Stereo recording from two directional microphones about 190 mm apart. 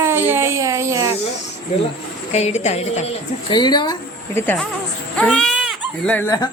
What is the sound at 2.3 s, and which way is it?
Speech, 35° left (ahead or behind).